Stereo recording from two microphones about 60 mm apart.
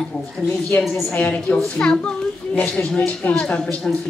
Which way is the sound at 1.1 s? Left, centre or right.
Left.